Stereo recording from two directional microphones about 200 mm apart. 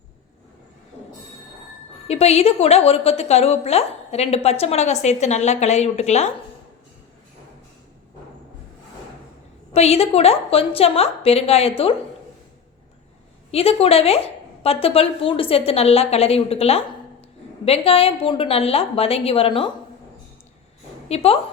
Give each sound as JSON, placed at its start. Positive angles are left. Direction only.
{"t": 2.0, "sound": "a woman's voice", "side_deg": 30}
{"t": 9.7, "sound": "a woman's voice", "side_deg": 30}
{"t": 13.5, "sound": "a woman's voice", "side_deg": 30}
{"t": 21.1, "sound": "a woman's voice", "side_deg": 30}